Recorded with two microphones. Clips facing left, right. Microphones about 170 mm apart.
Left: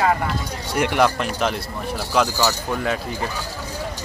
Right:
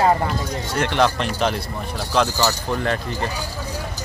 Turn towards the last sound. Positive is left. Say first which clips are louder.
# right 1 dB
turn(degrees=5)  # may be behind; listen again after turning